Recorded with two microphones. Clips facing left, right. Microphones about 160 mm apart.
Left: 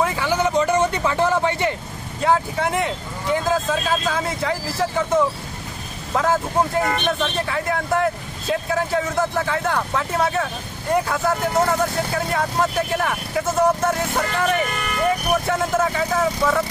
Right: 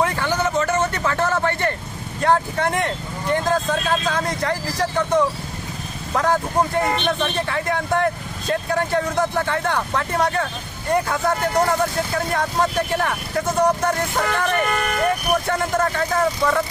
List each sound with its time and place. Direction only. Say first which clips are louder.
0.0 s a sound: left 1 dB; 5° left (ahead or behind)
2.2 s speech: right 1 dB; 5° left (ahead or behind)
14.8 s speech: right 2 dB; 60° right (ahead or behind)
15.4 s speech: left 1 dB; 5° left (ahead or behind)